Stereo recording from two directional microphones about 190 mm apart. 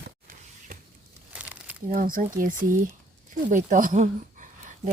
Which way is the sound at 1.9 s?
45° right (ahead or behind).